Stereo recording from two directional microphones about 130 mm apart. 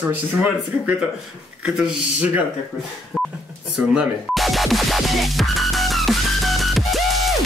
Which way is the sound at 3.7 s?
5° right (ahead or behind).